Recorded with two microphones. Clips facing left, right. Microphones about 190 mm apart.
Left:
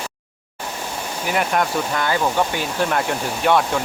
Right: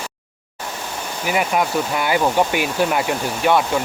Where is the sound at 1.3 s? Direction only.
5° right (ahead or behind).